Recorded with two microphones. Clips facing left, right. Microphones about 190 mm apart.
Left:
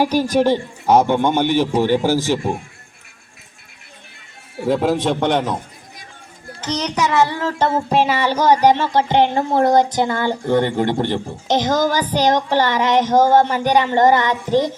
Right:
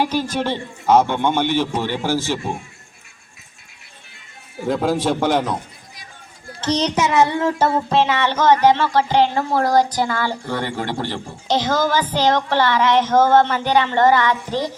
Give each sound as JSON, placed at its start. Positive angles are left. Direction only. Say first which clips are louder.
{"t": 0.0, "sound": "speech", "louder": "left 5 dB", "side_deg": 15}
{"t": 4.6, "sound": "a man's voice", "louder": "left 2 dB", "side_deg": 0}
{"t": 6.6, "sound": "a child's voice", "louder": "right 2 dB", "side_deg": -30}
{"t": 7.7, "sound": "speech", "louder": "left 1 dB", "side_deg": 15}